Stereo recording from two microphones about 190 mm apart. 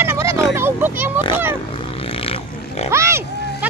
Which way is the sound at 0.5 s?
10° right (ahead or behind).